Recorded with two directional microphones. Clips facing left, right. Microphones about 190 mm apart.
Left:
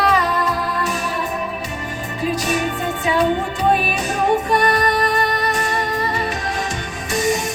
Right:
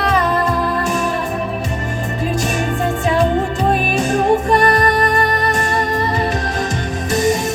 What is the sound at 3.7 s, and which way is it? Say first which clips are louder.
Music: right 2 dB; 45° right (ahead or behind).